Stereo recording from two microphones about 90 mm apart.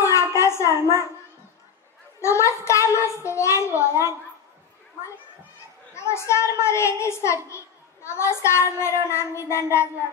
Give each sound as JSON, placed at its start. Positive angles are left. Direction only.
{"t": 0.0, "sound": "a sound", "side_deg": 35}
{"t": 2.2, "sound": "a child's voice", "side_deg": 35}
{"t": 5.9, "sound": "a woman's voice", "side_deg": 30}